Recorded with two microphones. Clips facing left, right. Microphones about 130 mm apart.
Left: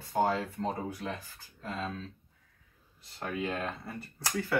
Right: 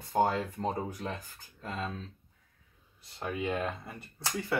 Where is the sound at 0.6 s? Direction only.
45° right (ahead or behind).